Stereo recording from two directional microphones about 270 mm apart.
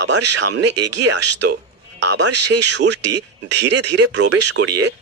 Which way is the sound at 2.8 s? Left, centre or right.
Right.